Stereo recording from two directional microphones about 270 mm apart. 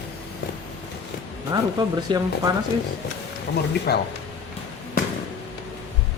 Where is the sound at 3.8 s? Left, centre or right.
Left.